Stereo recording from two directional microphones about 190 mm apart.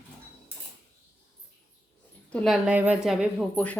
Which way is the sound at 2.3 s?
5° left (ahead or behind).